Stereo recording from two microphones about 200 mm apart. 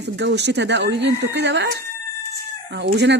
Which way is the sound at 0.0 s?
60° right (ahead or behind).